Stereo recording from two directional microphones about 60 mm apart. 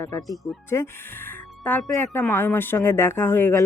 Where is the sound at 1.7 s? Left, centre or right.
Left.